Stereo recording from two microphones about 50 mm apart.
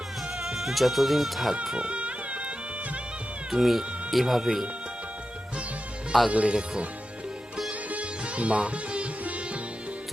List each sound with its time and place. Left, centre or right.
0.3 s speech: centre
1.7 s music: right
3.5 s speech: centre
6.3 s speech: centre
7.7 s sitar: right